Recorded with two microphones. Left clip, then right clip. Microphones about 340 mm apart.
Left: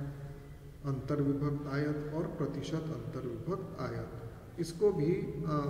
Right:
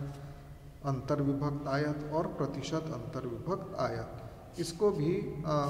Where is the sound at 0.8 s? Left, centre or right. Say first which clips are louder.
Right 2 dB; centre.